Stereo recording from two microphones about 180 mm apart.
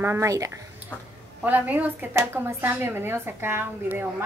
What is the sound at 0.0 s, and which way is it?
Speech, 15° right (ahead or behind).